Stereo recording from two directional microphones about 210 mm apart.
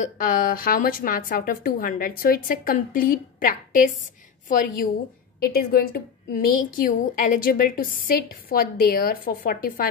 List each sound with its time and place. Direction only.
0.0 s a woman's voice: 40° left (ahead or behind)
5.5 s a woman's voice: 45° left (ahead or behind)